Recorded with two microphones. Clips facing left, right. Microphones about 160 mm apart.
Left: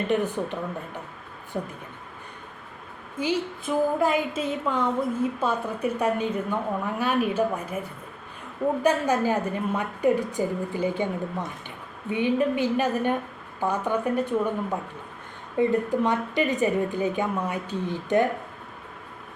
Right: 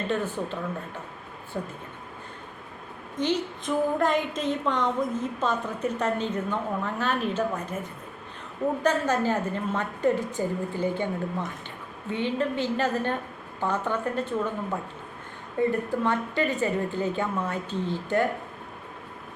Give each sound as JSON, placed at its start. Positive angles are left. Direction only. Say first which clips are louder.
{"t": 0.1, "sound": "a woman's voice", "louder": "left 4 dB", "side_deg": 15}
{"t": 3.2, "sound": "a woman's voice", "louder": "even", "side_deg": 10}
{"t": 8.8, "sound": "a woman's voice", "louder": "left 2 dB", "side_deg": 10}
{"t": 15.5, "sound": "a woman's voice", "louder": "left 3 dB", "side_deg": 15}